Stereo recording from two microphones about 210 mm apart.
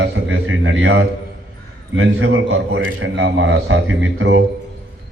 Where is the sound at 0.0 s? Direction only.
70° right (ahead or behind).